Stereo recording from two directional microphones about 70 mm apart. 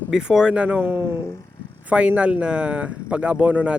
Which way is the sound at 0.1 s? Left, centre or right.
Centre.